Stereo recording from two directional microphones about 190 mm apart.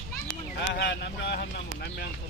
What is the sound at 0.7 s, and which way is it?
Speech, 65° left (ahead or behind).